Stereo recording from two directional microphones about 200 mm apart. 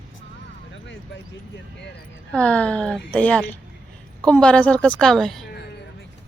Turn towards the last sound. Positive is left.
turn(degrees=0)  # may be behind; listen again after turning